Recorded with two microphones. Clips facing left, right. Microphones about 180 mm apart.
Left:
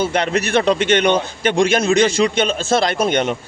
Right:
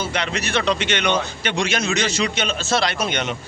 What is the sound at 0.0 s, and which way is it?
A man's voice, 50° left (ahead or behind).